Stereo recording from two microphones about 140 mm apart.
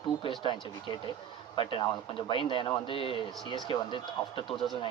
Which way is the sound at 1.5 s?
40° left (ahead or behind).